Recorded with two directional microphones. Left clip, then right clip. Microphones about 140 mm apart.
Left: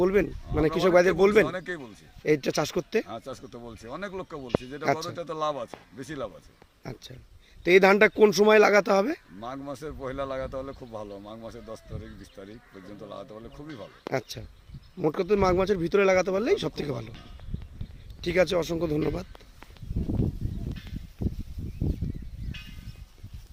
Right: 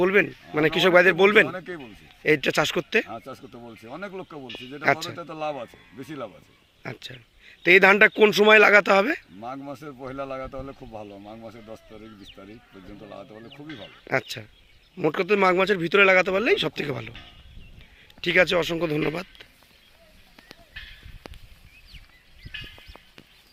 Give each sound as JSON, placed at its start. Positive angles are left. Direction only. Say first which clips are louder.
{"t": 0.0, "sound": "speech", "louder": "right 4 dB", "side_deg": 10}
{"t": 3.6, "sound": "speech", "louder": "right 1 dB", "side_deg": 25}
{"t": 4.8, "sound": "speech", "louder": "right 7 dB", "side_deg": 10}
{"t": 5.1, "sound": "speech", "louder": "left 1 dB", "side_deg": 25}
{"t": 6.8, "sound": "speech", "louder": "right 6 dB", "side_deg": 10}
{"t": 9.8, "sound": "speech", "louder": "left 3 dB", "side_deg": 25}
{"t": 12.4, "sound": "speech", "louder": "even", "side_deg": 20}
{"t": 13.7, "sound": "speech", "louder": "right 5 dB", "side_deg": 5}
{"t": 18.2, "sound": "speech", "louder": "right 4 dB", "side_deg": 10}